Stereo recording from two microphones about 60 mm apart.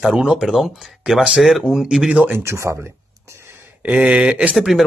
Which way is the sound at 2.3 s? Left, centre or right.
Right.